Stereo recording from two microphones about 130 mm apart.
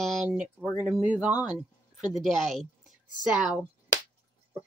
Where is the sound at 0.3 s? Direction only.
15° right (ahead or behind).